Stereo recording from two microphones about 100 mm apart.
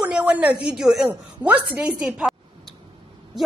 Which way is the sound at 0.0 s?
10° right (ahead or behind).